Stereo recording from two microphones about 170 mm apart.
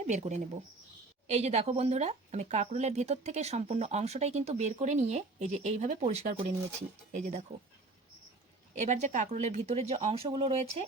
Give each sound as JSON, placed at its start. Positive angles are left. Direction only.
{"t": 0.1, "sound": "speech", "side_deg": -45}
{"t": 8.7, "sound": "speech", "side_deg": -45}